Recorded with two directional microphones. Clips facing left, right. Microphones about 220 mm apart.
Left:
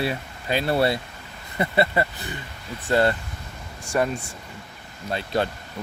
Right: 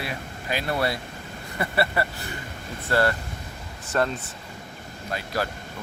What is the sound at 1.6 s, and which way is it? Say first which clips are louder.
Speech: left 3 dB; 20° left (ahead or behind).